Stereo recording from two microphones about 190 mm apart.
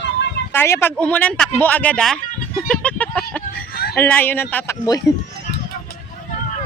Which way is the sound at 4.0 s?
10° left (ahead or behind).